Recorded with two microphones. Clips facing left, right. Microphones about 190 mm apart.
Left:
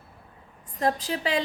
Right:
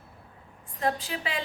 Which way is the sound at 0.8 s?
40° left (ahead or behind).